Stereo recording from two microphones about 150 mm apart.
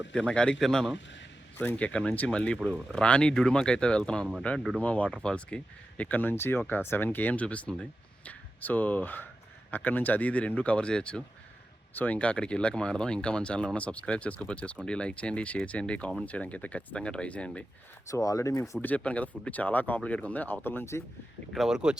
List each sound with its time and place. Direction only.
0.1 s speech: 5° left (ahead or behind)
18.1 s speech: 20° left (ahead or behind)
21.5 s speech: centre (ahead or behind)